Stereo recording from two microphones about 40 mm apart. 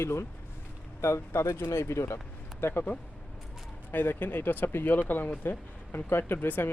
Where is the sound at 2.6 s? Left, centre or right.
Left.